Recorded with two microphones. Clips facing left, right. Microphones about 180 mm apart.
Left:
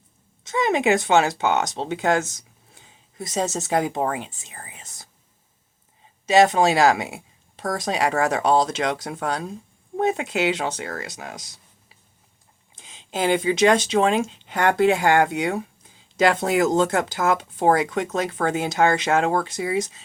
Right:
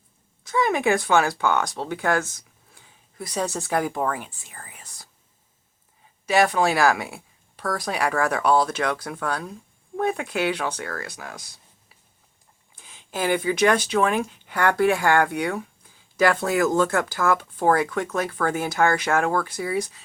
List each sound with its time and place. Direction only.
0.4 s speech: 20° left (ahead or behind)
6.2 s speech: 20° left (ahead or behind)
12.7 s speech: 20° left (ahead or behind)